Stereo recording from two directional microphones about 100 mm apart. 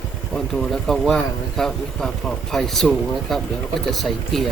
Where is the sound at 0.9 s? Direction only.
5° left (ahead or behind).